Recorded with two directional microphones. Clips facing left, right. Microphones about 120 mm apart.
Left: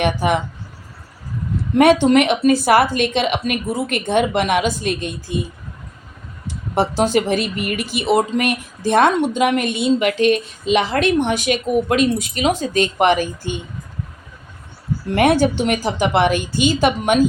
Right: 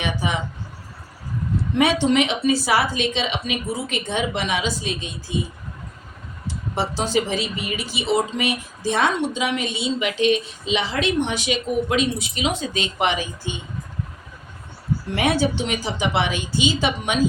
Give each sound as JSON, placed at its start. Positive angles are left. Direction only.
{"t": 0.0, "sound": "a woman's voice", "side_deg": 60}
{"t": 1.8, "sound": "a woman's voice", "side_deg": 50}
{"t": 6.7, "sound": "speech", "side_deg": 50}
{"t": 15.1, "sound": "speech", "side_deg": 55}